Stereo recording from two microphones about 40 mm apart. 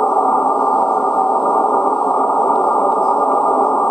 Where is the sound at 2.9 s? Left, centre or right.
Centre.